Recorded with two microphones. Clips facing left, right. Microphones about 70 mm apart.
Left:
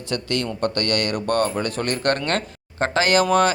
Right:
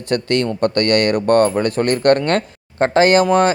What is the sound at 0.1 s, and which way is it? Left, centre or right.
Speech, right.